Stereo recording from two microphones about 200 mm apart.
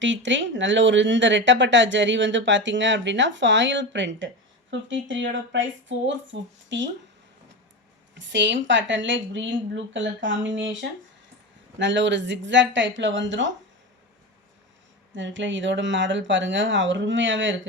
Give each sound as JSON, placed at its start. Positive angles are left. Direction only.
{"t": 0.0, "sound": "speech", "side_deg": -65}
{"t": 8.1, "sound": "speech", "side_deg": -65}
{"t": 15.1, "sound": "speech", "side_deg": -65}